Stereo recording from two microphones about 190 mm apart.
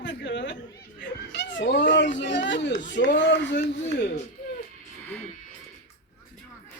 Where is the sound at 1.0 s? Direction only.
70° left (ahead or behind).